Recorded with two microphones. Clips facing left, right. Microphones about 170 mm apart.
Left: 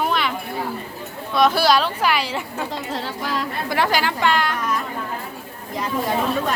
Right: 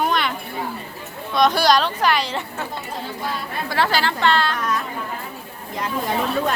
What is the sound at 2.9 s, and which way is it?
Speech, 90° left.